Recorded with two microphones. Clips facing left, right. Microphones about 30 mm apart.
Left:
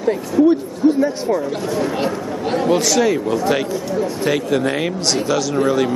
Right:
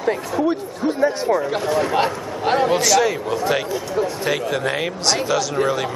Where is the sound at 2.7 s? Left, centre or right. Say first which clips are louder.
Left 1 dB; centre.